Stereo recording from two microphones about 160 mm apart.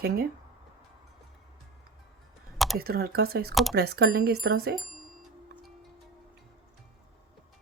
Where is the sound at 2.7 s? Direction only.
70° right (ahead or behind).